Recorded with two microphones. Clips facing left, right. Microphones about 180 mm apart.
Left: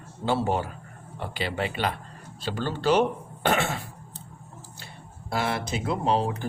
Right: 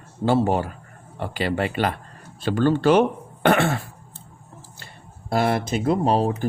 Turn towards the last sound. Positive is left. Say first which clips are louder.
# right 5 dB
turn(degrees=-40)  # may be behind; listen again after turning